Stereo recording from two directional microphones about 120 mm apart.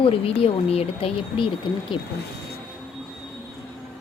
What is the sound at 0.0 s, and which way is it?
Speech, 55° left (ahead or behind).